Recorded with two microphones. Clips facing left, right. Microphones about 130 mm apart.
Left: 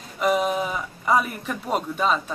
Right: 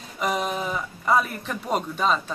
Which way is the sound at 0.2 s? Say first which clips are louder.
Left 4 dB; 5° left (ahead or behind).